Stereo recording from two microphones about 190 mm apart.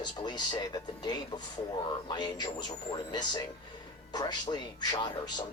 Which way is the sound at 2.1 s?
20° left (ahead or behind).